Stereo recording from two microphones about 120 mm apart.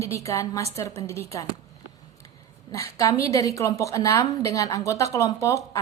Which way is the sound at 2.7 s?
25° left (ahead or behind).